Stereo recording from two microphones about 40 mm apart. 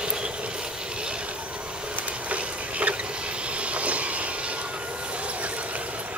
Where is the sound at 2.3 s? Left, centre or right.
Right.